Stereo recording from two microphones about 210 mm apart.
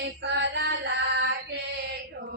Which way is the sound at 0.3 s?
55° right (ahead or behind).